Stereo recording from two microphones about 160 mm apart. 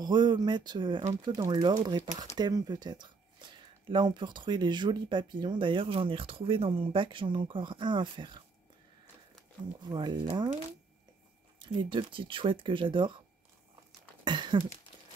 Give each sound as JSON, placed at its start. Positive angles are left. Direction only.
{"t": 0.0, "sound": "speech", "side_deg": -30}
{"t": 9.8, "sound": "speech", "side_deg": -25}
{"t": 11.6, "sound": "speech", "side_deg": -30}
{"t": 14.2, "sound": "a sound", "side_deg": -30}